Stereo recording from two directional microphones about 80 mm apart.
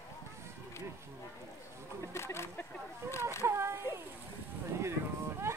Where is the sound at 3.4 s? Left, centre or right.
Right.